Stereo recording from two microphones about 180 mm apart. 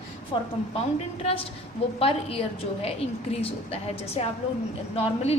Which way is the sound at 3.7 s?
35° left (ahead or behind).